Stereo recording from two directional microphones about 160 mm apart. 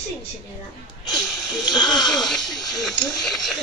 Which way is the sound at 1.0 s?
25° left (ahead or behind).